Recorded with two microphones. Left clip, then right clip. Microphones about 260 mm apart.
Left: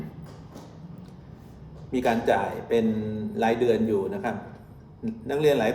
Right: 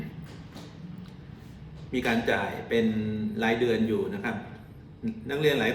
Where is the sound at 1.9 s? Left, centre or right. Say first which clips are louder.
Left 4 dB; centre.